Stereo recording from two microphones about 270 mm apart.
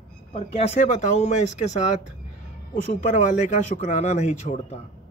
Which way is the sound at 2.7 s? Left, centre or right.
Left.